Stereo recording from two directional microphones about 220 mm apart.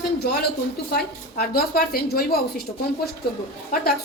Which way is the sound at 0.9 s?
45° left (ahead or behind).